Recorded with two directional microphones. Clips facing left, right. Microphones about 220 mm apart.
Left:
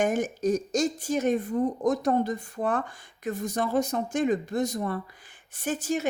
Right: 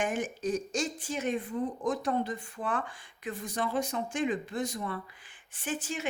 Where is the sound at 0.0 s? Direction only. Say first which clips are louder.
Left 6 dB; 40° left (ahead or behind).